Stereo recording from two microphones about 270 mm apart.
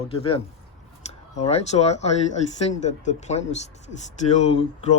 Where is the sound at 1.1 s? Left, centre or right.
Left.